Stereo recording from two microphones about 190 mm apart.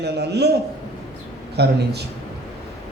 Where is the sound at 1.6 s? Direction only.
60° right (ahead or behind).